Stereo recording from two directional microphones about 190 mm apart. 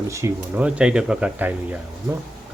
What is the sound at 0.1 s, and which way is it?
Speech, 15° right (ahead or behind).